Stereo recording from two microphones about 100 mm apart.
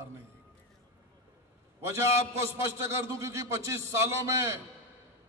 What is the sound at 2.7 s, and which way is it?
A man's voice, 30° right (ahead or behind).